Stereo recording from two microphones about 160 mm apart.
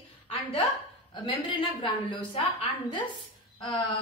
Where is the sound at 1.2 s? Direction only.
30° left (ahead or behind).